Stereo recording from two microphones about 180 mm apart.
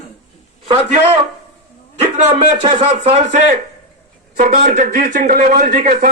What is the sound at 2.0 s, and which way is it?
A man's voice, 35° right (ahead or behind).